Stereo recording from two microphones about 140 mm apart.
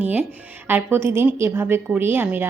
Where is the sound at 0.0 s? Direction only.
15° right (ahead or behind).